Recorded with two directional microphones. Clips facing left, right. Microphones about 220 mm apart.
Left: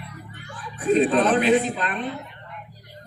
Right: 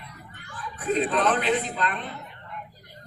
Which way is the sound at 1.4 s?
15° left (ahead or behind).